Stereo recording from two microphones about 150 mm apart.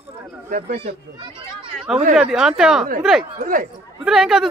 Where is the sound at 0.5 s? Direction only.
60° right (ahead or behind).